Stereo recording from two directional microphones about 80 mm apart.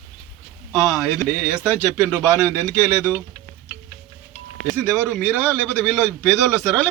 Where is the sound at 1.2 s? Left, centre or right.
Left.